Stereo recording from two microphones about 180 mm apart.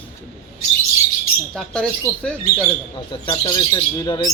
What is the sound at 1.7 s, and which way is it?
Speech, 5° left (ahead or behind).